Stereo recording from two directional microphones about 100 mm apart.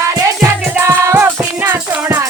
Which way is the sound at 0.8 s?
30° right (ahead or behind).